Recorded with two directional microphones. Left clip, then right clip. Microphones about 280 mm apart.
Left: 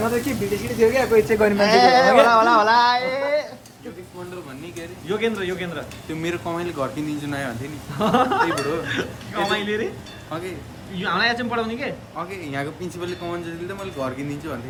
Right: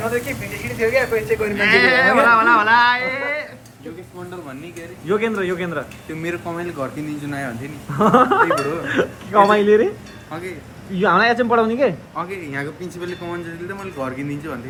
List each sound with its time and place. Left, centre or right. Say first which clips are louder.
0.2 s speech: left 1 dB; centre
0.9 s speech: even; left
1.5 s speech: right 1 dB; centre
2.3 s a sound: right 2 dB; centre
4.8 s speech: right 3 dB; centre
10.9 s speech: right 6 dB; centre
12.1 s speech: right 3 dB; centre